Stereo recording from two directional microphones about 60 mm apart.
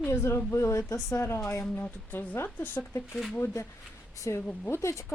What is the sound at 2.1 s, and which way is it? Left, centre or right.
Speech, left.